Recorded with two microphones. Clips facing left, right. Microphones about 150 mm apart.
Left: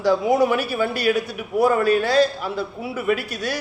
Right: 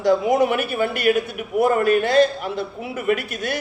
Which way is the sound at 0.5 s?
55° right (ahead or behind).